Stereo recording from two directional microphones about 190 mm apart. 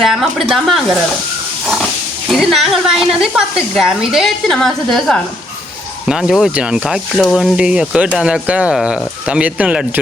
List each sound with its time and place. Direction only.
0.0 s speech: centre (ahead or behind)
2.2 s speech: centre (ahead or behind)